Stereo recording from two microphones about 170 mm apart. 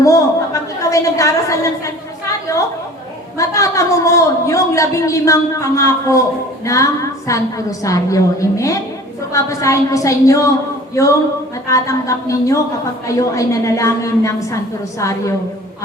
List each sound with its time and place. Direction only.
0.0 s a woman's voice: 20° left (ahead or behind)
3.3 s a woman's voice: 20° left (ahead or behind)